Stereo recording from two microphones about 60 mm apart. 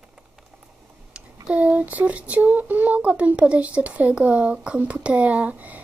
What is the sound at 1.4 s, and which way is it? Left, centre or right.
Speech, right.